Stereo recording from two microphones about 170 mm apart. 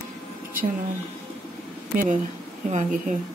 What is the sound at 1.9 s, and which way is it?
Speech, 55° right (ahead or behind).